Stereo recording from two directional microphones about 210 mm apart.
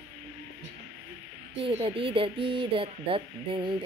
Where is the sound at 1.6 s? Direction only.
25° right (ahead or behind).